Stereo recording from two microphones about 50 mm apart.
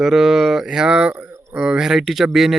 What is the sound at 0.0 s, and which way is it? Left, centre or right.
Speech, centre.